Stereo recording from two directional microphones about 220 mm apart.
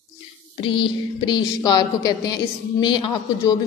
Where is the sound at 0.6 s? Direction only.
25° left (ahead or behind).